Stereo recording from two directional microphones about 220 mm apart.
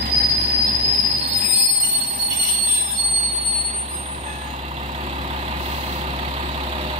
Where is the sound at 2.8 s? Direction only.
30° right (ahead or behind).